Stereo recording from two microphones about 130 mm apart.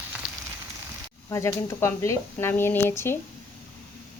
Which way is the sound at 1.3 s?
20° left (ahead or behind).